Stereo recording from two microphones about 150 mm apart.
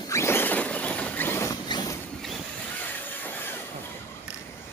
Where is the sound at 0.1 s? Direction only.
15° left (ahead or behind).